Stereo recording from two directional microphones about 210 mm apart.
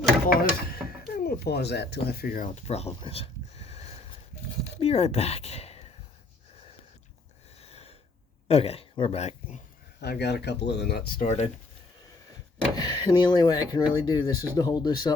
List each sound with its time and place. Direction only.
0.3 s speech: 45° left (ahead or behind)
4.8 s a sound: 30° left (ahead or behind)
7.6 s a sound: 30° left (ahead or behind)
8.4 s speech: 30° left (ahead or behind)
10.0 s speech: 50° left (ahead or behind)
12.7 s speech: 20° left (ahead or behind)